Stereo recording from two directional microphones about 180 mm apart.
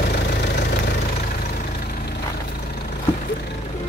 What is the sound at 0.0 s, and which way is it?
Engine, 65° left (ahead or behind).